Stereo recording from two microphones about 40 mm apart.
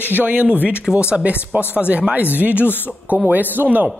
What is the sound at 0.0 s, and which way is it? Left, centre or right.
Speech, right.